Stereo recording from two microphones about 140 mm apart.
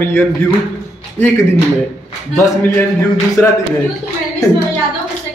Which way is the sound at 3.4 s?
15° left (ahead or behind).